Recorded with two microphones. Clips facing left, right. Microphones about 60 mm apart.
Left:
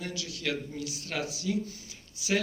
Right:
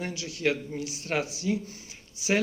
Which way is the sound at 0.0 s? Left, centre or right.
Right.